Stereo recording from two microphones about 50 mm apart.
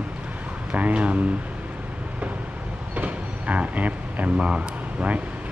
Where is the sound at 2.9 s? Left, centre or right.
Right.